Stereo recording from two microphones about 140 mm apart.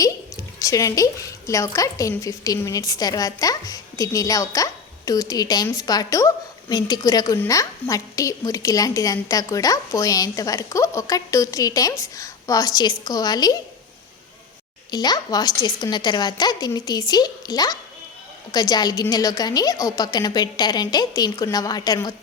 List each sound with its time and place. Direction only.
0.6 s a woman's voice: 25° left (ahead or behind)
14.8 s a woman's voice: 30° left (ahead or behind)